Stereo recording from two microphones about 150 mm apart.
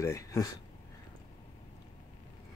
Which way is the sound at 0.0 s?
20° left (ahead or behind).